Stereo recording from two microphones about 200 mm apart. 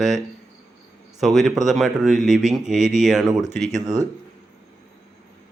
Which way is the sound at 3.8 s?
15° right (ahead or behind).